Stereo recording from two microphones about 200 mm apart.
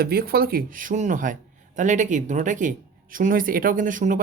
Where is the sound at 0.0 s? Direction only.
50° right (ahead or behind).